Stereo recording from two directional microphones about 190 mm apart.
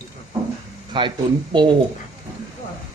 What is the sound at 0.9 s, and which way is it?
Speech, 25° right (ahead or behind).